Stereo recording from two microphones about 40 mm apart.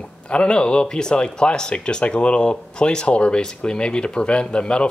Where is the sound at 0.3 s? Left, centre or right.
Left.